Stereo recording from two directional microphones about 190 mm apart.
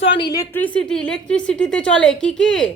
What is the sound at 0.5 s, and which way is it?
A woman's voice, 10° left (ahead or behind).